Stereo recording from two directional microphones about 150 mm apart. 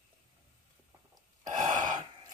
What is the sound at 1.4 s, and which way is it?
Gasp, 55° right (ahead or behind).